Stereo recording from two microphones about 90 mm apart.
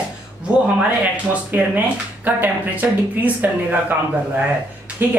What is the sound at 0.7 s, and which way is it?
A woman's voice, 15° right (ahead or behind).